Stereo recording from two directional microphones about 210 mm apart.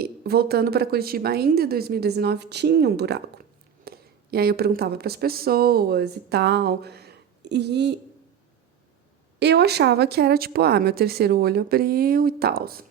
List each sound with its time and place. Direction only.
0.0 s a woman's voice: 50° right (ahead or behind)
9.4 s a woman's voice: 50° right (ahead or behind)